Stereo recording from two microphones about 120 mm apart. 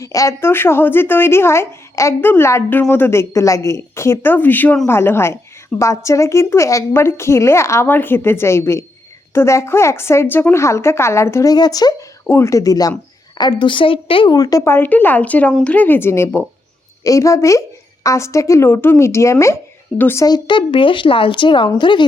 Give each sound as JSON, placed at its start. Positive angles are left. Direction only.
{"t": 0.0, "sound": "a woman's voice", "side_deg": 30}
{"t": 12.2, "sound": "a woman's voice", "side_deg": 20}
{"t": 14.3, "sound": "a woman's voice", "side_deg": 30}
{"t": 20.2, "sound": "a woman's voice", "side_deg": 40}